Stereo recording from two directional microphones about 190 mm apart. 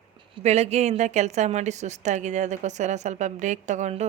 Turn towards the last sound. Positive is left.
turn(degrees=-35)  # may be behind; listen again after turning